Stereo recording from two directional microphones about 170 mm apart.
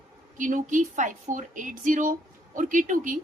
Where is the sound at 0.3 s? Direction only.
50° right (ahead or behind).